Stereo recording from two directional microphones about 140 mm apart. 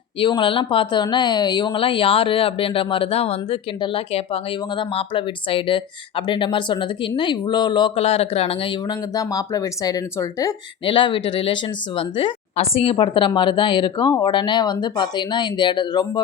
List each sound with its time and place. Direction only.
0.2 s speech: 35° left (ahead or behind)
10.8 s speech: 35° left (ahead or behind)